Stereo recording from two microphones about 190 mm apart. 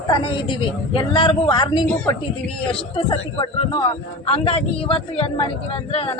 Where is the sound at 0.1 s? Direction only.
25° left (ahead or behind).